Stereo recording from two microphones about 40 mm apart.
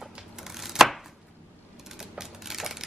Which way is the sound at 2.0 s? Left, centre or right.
Centre.